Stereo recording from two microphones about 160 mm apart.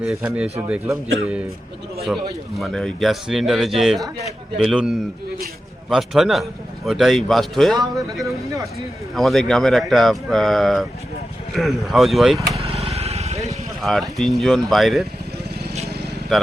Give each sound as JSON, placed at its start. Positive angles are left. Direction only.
{"t": 0.0, "sound": "a man's voice", "side_deg": -5}
{"t": 2.6, "sound": "a man's voice", "side_deg": 0}
{"t": 12.5, "sound": "vehicle", "side_deg": -40}
{"t": 13.8, "sound": "a man's voice", "side_deg": 0}